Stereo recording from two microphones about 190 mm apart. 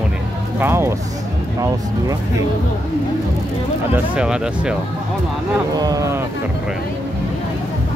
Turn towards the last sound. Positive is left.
turn(degrees=-15)  # may be behind; listen again after turning